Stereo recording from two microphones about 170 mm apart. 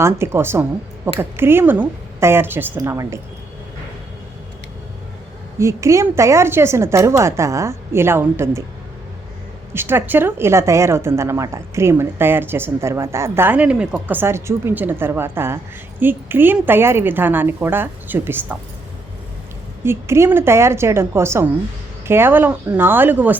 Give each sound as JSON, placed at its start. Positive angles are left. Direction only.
{"t": 0.0, "sound": "speech", "side_deg": -15}
{"t": 5.5, "sound": "speech", "side_deg": -15}
{"t": 9.7, "sound": "speech", "side_deg": -15}
{"t": 19.8, "sound": "speech", "side_deg": -15}